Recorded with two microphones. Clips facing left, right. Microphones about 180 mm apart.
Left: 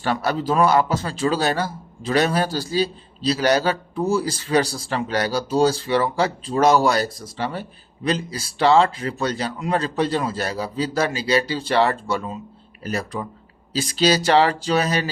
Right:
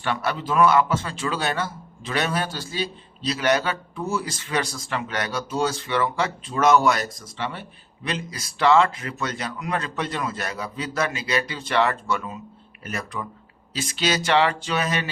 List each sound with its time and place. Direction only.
0.0 s a man's voice: 40° left (ahead or behind)